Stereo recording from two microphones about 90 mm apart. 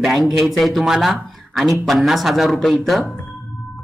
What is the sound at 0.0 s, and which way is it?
Speech, centre (ahead or behind).